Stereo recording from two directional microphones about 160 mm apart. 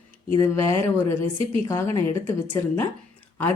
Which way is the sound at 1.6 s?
15° left (ahead or behind).